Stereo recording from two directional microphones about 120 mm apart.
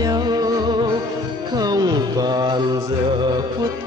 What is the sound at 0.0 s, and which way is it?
Music, 35° right (ahead or behind).